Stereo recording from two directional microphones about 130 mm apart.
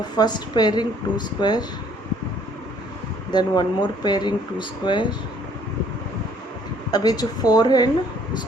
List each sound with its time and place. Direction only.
0.2 s speech: 35° left (ahead or behind)
3.3 s speech: 35° left (ahead or behind)
6.9 s speech: 30° left (ahead or behind)